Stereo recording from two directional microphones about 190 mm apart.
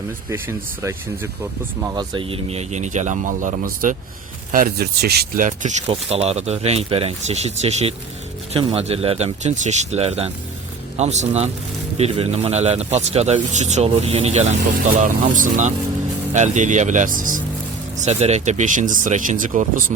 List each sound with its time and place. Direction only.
0.3 s a man's voice: 10° right (ahead or behind); by 5.5 s 55° right (ahead or behind)
5.5 s a man's voice: 35° right (ahead or behind)